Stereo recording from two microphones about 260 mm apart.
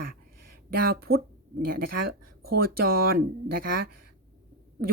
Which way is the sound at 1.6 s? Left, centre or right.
Right.